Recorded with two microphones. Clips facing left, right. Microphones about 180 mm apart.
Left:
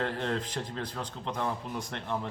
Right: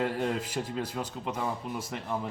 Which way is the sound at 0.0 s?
10° right (ahead or behind).